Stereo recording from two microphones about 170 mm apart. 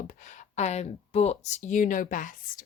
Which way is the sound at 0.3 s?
45° left (ahead or behind).